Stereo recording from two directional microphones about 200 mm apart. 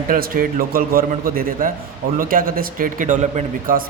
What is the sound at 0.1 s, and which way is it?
Speech, 45° right (ahead or behind).